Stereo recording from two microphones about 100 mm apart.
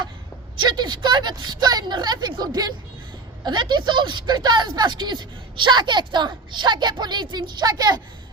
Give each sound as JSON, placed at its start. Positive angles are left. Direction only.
{"t": 0.7, "sound": "a woman's voice", "side_deg": -50}